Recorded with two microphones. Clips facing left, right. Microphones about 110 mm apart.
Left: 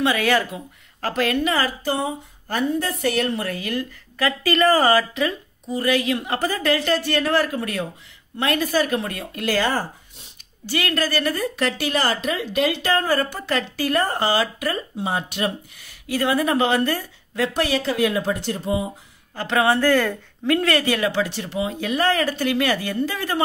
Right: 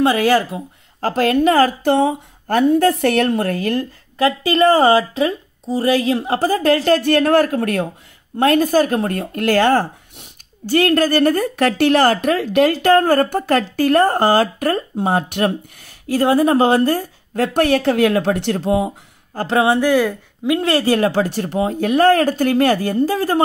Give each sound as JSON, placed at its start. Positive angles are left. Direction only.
{"t": 0.0, "sound": "a woman's voice", "side_deg": -30}
{"t": 2.0, "sound": "a woman's voice", "side_deg": -60}
{"t": 4.2, "sound": "a woman's voice", "side_deg": -25}
{"t": 8.4, "sound": "speech", "side_deg": -45}
{"t": 19.3, "sound": "speech", "side_deg": -35}
{"t": 19.6, "sound": "speech", "side_deg": -15}